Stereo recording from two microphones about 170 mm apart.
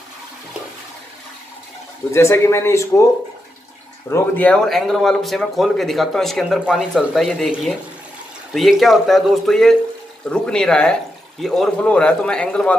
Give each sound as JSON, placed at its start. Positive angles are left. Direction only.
{"t": 2.1, "sound": "speech", "side_deg": 15}
{"t": 4.1, "sound": "a man's voice", "side_deg": 10}